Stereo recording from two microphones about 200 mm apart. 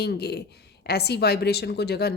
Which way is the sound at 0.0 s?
55° left (ahead or behind).